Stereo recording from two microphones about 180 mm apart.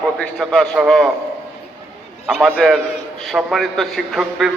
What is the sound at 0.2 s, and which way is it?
Speech, centre (ahead or behind).